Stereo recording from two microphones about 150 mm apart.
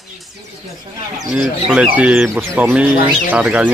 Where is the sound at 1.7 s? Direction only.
10° right (ahead or behind).